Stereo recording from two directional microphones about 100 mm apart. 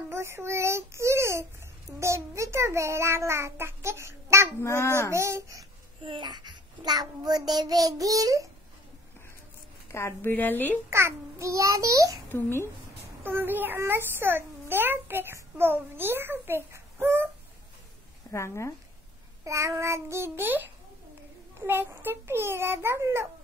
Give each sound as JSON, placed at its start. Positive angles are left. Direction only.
{"t": 0.1, "sound": "a child's voice", "side_deg": -25}
{"t": 4.6, "sound": "a woman's voice", "side_deg": 30}
{"t": 5.1, "sound": "a child's voice", "side_deg": -30}
{"t": 6.0, "sound": "child singing", "side_deg": -50}
{"t": 9.9, "sound": "a woman's voice", "side_deg": 25}
{"t": 10.9, "sound": "child singing", "side_deg": -30}
{"t": 12.3, "sound": "a woman's voice", "side_deg": 20}
{"t": 13.2, "sound": "a child's voice", "side_deg": -20}
{"t": 18.3, "sound": "a woman's voice", "side_deg": 30}
{"t": 19.4, "sound": "a child's voice", "side_deg": -30}